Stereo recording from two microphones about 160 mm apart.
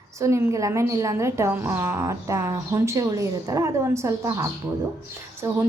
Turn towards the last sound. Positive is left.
turn(degrees=-15)  # may be behind; listen again after turning